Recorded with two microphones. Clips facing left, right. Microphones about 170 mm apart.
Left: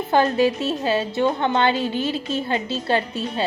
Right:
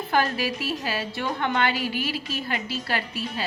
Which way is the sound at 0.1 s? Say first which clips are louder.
Left 7 dB; 25° left (ahead or behind).